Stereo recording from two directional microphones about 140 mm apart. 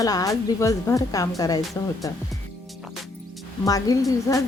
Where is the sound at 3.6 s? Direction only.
25° left (ahead or behind).